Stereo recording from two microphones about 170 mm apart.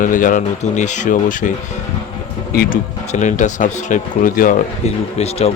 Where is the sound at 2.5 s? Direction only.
60° left (ahead or behind).